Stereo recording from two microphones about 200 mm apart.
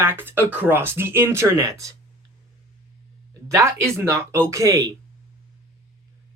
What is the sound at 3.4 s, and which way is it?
Speech, 15° right (ahead or behind).